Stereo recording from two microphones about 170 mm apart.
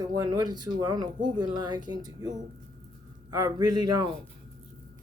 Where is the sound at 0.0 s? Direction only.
20° right (ahead or behind).